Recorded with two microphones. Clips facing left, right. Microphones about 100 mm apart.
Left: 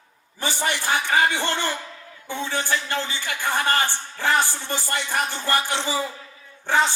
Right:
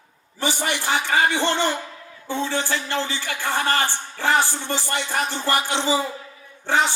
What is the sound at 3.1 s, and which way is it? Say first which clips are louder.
Speech: even; 15° left (ahead or behind).